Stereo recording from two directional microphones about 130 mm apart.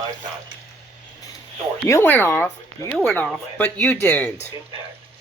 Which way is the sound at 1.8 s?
15° left (ahead or behind).